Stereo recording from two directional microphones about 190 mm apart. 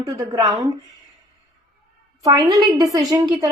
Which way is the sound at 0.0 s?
25° right (ahead or behind).